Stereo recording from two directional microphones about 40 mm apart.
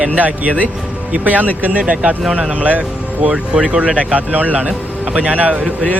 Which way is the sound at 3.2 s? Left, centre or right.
Right.